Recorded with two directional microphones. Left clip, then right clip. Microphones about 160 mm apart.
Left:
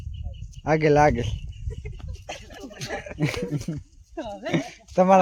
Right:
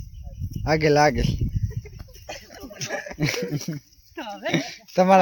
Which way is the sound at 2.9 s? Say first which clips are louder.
Right 2 dB; 50° right (ahead or behind).